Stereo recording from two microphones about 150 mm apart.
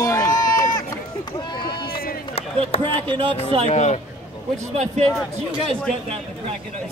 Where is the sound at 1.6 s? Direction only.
90° left.